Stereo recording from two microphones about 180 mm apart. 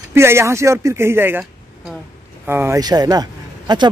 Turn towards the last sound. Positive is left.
turn(degrees=-20)  # may be behind; listen again after turning